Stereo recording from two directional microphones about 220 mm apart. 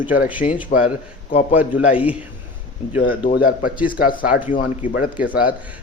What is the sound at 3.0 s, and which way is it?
A man's voice, 40° left (ahead or behind).